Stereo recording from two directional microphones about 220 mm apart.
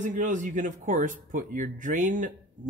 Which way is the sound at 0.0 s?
35° right (ahead or behind).